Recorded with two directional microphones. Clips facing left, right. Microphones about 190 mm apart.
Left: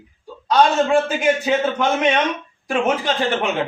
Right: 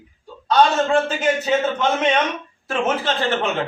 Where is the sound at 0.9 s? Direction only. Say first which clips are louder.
Left 2 dB; 10° left (ahead or behind).